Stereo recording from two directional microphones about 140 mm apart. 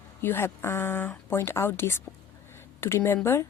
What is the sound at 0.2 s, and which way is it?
A woman's voice, 15° left (ahead or behind).